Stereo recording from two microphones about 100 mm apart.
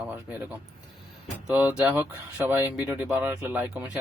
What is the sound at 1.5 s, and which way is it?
Speech, 15° right (ahead or behind).